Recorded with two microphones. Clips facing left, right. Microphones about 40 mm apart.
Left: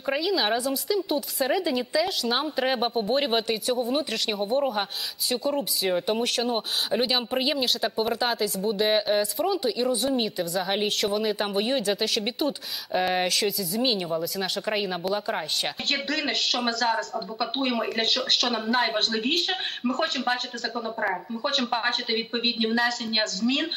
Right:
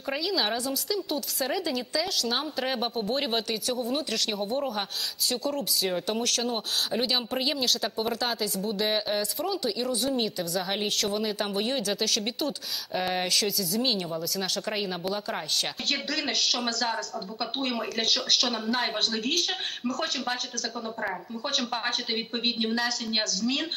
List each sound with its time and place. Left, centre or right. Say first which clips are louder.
0.1 s speech: left 4 dB; centre